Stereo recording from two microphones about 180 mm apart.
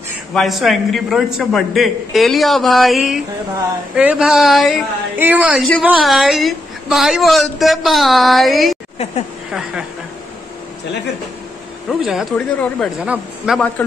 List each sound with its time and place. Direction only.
0.3 s a man's voice: centre (ahead or behind)
8.9 s speech: 35° left (ahead or behind)
9.5 s a man's voice: 5° right (ahead or behind)
11.9 s a man's voice: centre (ahead or behind)
13.0 s a man's voice: 5° right (ahead or behind)
13.8 s a man's voice: 10° left (ahead or behind)